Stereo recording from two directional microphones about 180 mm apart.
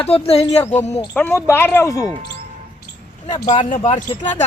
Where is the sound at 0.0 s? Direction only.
35° left (ahead or behind).